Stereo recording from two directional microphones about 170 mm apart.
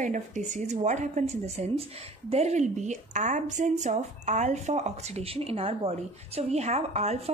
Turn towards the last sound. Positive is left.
turn(degrees=-40)  # may be behind; listen again after turning